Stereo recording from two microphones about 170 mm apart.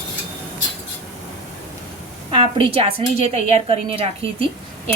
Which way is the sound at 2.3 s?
30° right (ahead or behind).